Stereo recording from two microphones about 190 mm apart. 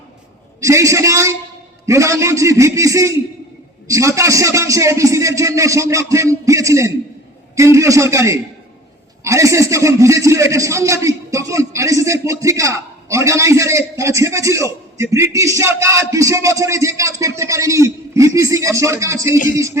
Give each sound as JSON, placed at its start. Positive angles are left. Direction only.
{"t": 0.6, "sound": "a man's voice", "side_deg": -15}